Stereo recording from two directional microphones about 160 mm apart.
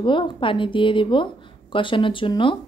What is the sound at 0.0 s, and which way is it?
Speech, 30° left (ahead or behind).